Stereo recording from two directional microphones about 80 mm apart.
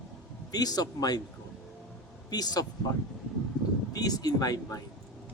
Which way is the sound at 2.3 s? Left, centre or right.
Left.